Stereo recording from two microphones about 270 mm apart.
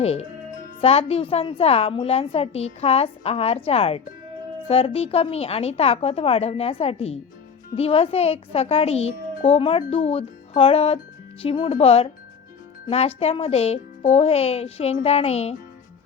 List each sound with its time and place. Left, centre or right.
0.0 s a child's voice: left